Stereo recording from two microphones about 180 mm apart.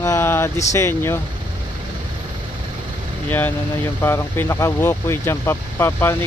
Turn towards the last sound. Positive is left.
turn(degrees=15)  # may be behind; listen again after turning